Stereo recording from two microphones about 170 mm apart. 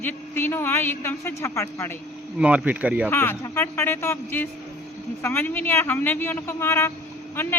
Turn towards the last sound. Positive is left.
turn(degrees=15)  # may be behind; listen again after turning